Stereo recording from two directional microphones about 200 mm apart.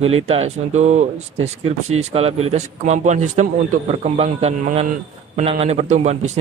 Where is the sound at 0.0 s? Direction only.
30° right (ahead or behind).